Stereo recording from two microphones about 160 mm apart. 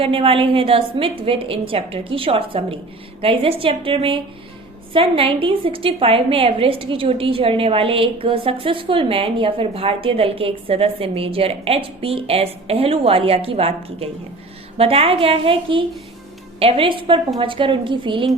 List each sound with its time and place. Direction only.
0.0 s a woman's voice: 35° right (ahead or behind)